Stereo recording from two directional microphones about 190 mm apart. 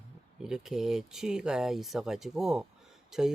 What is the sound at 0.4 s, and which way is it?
Speech, 5° right (ahead or behind).